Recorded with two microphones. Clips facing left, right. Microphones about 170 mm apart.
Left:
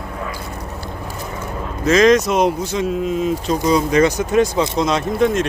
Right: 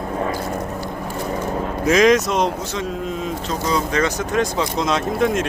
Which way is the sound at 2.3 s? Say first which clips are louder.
Left 4 dB; 10° left (ahead or behind).